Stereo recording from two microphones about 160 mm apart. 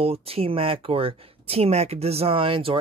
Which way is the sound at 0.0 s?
40° right (ahead or behind).